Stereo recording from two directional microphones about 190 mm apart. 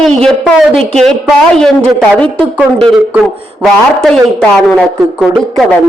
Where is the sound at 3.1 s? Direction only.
Centre (ahead or behind).